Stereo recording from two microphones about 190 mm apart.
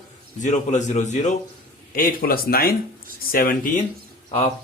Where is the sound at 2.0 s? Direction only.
50° left (ahead or behind).